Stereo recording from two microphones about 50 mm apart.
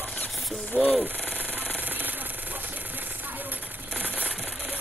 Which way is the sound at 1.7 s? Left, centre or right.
Right.